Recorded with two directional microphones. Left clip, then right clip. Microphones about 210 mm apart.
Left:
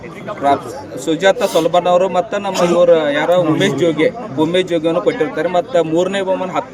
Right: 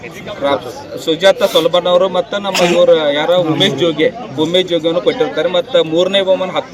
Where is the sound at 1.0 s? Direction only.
20° left (ahead or behind).